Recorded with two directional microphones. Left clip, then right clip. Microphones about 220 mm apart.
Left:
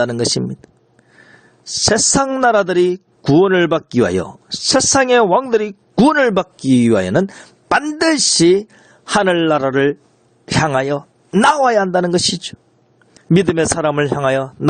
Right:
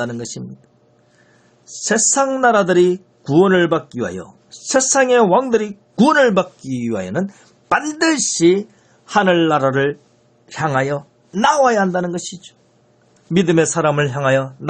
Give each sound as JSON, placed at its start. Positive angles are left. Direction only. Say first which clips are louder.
{"t": 0.0, "sound": "a man's voice", "louder": "left 9 dB", "side_deg": 45}
{"t": 1.8, "sound": "a man's voice", "louder": "left 2 dB", "side_deg": 45}